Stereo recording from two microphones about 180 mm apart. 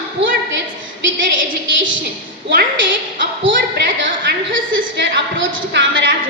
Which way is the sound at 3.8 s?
85° right.